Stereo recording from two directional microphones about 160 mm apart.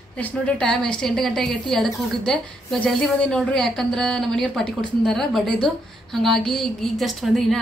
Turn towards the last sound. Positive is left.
turn(degrees=0)  # may be behind; listen again after turning